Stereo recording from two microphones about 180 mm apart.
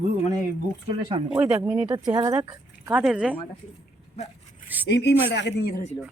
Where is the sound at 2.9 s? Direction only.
5° right (ahead or behind).